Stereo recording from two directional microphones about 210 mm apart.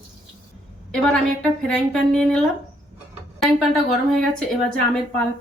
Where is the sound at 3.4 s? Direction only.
Centre (ahead or behind).